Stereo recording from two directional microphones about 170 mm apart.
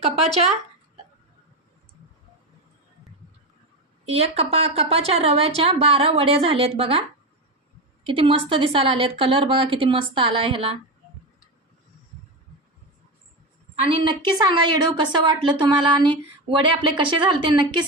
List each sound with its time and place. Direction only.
0.0 s a woman's voice: 40° right (ahead or behind)
4.0 s a woman's voice: 35° right (ahead or behind)
8.0 s a woman's voice: 30° right (ahead or behind)
13.7 s a woman's voice: 35° right (ahead or behind)